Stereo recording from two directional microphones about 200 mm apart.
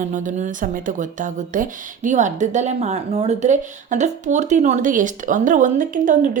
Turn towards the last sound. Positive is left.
turn(degrees=-40)  # may be behind; listen again after turning